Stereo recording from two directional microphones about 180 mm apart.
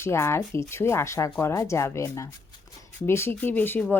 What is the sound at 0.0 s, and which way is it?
A woman's voice, 15° left (ahead or behind).